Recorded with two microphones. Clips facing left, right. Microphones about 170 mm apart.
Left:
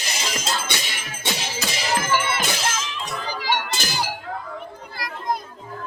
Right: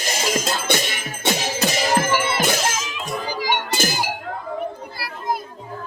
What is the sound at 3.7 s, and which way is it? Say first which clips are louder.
Chink: right 6 dB; 50° right (ahead or behind).